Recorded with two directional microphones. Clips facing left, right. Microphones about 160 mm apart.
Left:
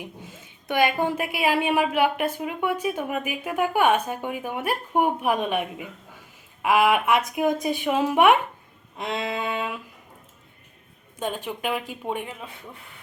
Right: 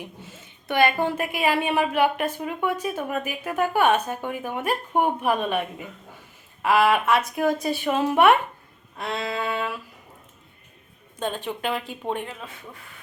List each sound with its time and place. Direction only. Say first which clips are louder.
0.0 s a woman's voice: left 1 dB; 10° left (ahead or behind)
11.2 s a woman's voice: right 1 dB; 10° left (ahead or behind)